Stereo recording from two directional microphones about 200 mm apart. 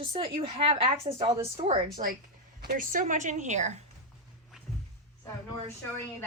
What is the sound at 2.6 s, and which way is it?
A woman's voice, 45° right (ahead or behind).